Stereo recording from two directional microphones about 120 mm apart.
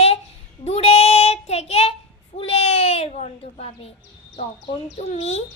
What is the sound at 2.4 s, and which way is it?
A child's voice, 55° left (ahead or behind).